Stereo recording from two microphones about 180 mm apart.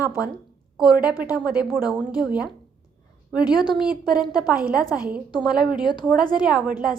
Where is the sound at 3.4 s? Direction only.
25° left (ahead or behind).